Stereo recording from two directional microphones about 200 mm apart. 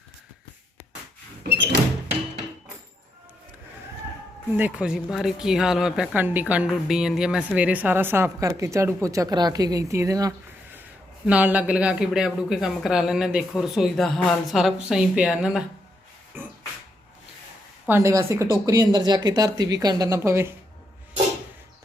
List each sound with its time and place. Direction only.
1.5 s a sound: 60° right (ahead or behind)
4.5 s speech: 5° right (ahead or behind)
17.8 s speech: 15° right (ahead or behind)